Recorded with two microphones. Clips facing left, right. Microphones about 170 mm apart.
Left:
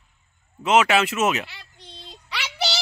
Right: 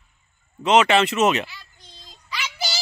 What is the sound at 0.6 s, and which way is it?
Speech, 5° left (ahead or behind).